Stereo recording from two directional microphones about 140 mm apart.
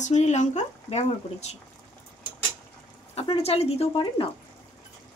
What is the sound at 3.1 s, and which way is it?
Speech, 45° left (ahead or behind).